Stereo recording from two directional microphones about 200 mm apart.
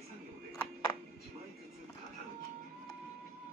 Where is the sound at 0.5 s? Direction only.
10° left (ahead or behind).